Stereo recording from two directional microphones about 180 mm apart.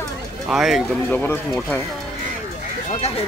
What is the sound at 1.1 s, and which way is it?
Speech, 10° left (ahead or behind).